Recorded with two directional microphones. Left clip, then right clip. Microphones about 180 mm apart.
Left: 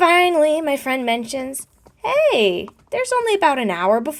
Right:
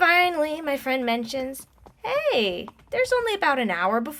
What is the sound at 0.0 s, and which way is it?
A woman's voice, 30° left (ahead or behind).